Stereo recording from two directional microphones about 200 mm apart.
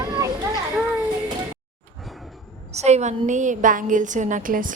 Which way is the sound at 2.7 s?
35° right (ahead or behind).